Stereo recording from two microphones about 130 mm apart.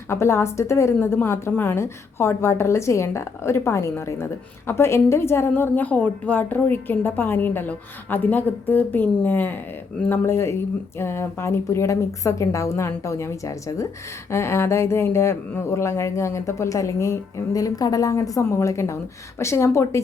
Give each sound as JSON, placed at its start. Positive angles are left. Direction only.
{"t": 0.1, "sound": "a woman's voice", "side_deg": 20}